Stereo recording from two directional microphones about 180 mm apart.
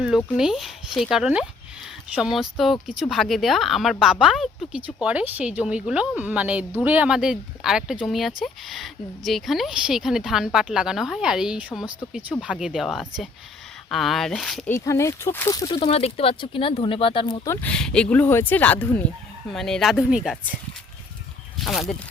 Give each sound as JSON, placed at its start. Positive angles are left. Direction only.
{"t": 0.3, "sound": "a woman's voice", "side_deg": 0}
{"t": 14.8, "sound": "speech", "side_deg": 15}
{"t": 17.4, "sound": "speech", "side_deg": 10}
{"t": 21.6, "sound": "speech", "side_deg": 0}